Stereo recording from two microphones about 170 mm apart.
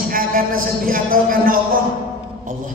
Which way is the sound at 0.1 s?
55° right (ahead or behind).